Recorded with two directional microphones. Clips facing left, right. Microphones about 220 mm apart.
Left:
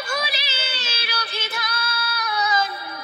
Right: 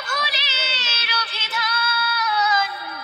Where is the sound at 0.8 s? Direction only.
10° left (ahead or behind).